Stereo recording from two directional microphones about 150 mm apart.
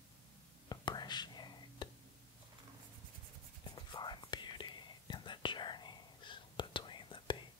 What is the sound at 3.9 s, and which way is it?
Whispering, 30° left (ahead or behind).